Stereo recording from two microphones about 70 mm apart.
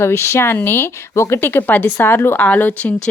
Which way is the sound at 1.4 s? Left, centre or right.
Left.